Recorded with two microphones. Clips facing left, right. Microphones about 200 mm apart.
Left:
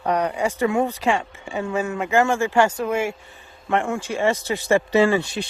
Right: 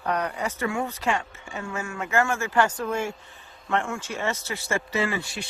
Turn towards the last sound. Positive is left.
turn(degrees=20)  # may be behind; listen again after turning